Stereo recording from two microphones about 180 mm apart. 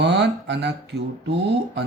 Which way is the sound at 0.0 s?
70° right (ahead or behind).